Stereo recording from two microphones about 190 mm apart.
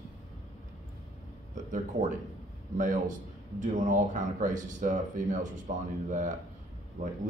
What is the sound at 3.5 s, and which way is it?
A man's voice, 40° right (ahead or behind).